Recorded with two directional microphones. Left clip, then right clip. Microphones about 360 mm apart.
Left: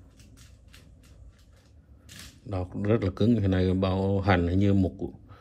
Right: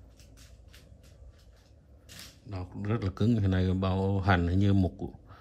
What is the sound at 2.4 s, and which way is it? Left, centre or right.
Speech, centre.